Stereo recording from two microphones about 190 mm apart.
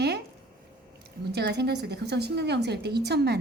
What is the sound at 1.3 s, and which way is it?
A woman's voice, 60° right (ahead or behind).